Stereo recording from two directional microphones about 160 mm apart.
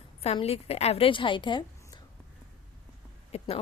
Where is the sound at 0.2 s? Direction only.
40° left (ahead or behind).